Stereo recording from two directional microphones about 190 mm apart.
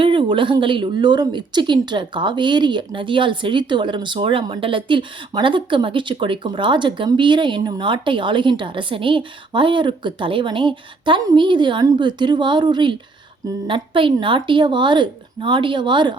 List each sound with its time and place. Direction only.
0.0 s a woman's voice: 25° right (ahead or behind)